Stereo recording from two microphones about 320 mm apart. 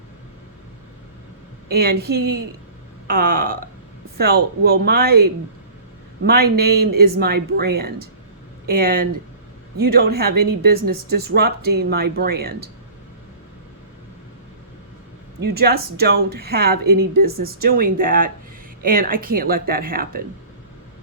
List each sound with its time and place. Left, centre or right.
1.7 s speech: right
15.4 s speech: right